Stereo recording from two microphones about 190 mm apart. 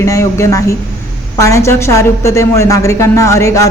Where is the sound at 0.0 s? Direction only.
15° left (ahead or behind).